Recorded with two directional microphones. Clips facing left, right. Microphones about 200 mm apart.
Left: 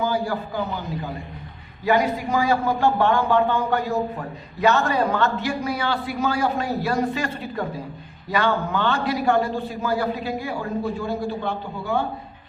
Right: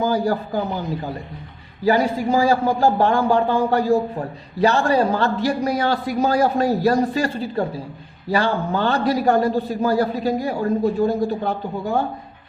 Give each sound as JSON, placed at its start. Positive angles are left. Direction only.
{"t": 0.0, "sound": "a man's voice", "side_deg": -40}
{"t": 1.8, "sound": "a man's voice", "side_deg": -30}